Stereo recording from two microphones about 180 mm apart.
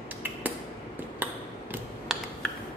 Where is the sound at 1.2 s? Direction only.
10° right (ahead or behind).